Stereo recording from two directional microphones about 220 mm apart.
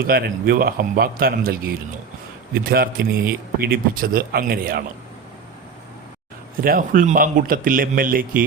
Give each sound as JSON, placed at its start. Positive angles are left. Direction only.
{"t": 0.0, "sound": "speech", "side_deg": -45}
{"t": 6.6, "sound": "speech", "side_deg": -40}